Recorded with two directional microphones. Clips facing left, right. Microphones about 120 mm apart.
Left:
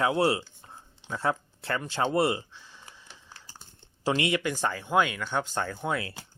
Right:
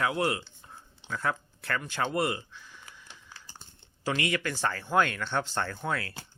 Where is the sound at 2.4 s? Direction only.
30° left (ahead or behind).